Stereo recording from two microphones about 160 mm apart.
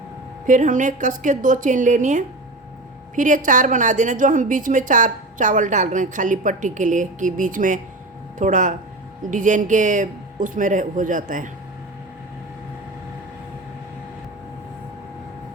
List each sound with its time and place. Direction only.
0.4 s a woman's voice: 55° right (ahead or behind)